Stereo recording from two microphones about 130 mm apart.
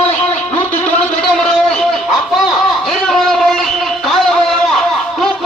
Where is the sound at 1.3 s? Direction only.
5° left (ahead or behind).